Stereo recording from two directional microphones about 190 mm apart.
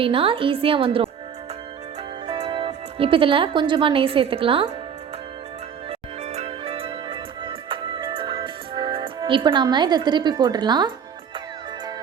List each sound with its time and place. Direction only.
0.0 s a woman's voice: 30° right (ahead or behind)
2.2 s speech: 30° right (ahead or behind)
5.9 s music: 35° right (ahead or behind)